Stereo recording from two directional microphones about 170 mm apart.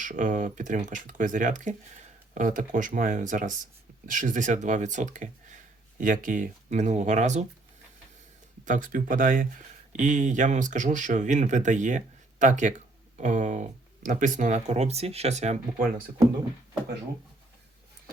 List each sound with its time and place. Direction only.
0.0 s speech: 50° right (ahead or behind)
8.6 s speech: 50° right (ahead or behind)